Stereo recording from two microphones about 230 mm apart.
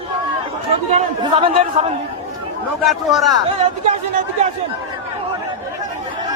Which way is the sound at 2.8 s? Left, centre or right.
Centre.